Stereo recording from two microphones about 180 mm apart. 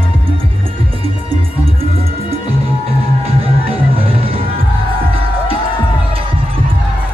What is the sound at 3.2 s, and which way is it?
Music, 30° right (ahead or behind).